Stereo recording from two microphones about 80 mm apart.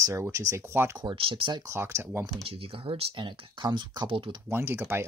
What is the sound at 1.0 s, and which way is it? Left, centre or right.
Speech, right.